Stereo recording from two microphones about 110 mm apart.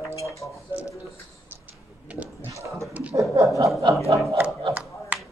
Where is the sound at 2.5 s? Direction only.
25° right (ahead or behind).